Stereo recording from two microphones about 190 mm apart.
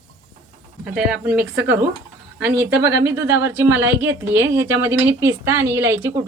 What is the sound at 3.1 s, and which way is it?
A woman's voice, 10° right (ahead or behind).